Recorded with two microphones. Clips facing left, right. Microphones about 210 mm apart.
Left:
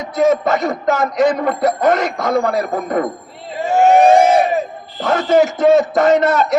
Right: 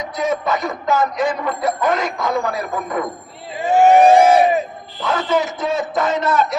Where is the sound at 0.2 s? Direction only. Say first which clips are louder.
Left 6 dB; 50° left (ahead or behind).